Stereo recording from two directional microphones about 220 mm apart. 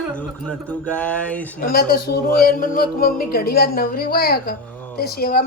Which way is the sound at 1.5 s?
40° left (ahead or behind).